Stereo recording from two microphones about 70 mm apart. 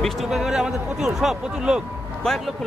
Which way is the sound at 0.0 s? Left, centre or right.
Centre.